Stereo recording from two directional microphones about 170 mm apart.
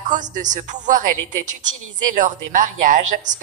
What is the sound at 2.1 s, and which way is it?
A woman's voice, 50° right (ahead or behind).